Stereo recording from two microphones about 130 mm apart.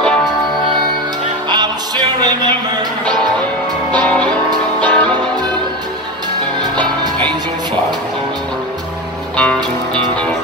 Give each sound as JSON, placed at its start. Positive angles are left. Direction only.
{"t": 1.5, "sound": "music", "side_deg": -30}
{"t": 4.0, "sound": "music", "side_deg": 10}
{"t": 9.4, "sound": "music", "side_deg": 10}